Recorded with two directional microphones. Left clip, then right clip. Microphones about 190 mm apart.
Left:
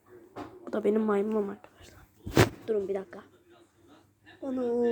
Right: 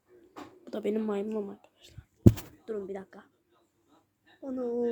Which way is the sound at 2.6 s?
Centre (ahead or behind).